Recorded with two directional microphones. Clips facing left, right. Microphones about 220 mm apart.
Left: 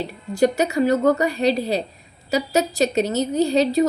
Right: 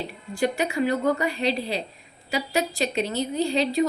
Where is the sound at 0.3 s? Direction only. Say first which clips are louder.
Left 6 dB; 40° left (ahead or behind).